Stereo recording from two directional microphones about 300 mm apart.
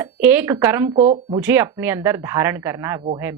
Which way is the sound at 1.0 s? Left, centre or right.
Centre.